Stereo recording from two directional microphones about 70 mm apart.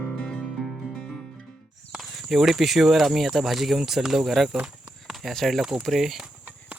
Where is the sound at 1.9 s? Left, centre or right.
Centre.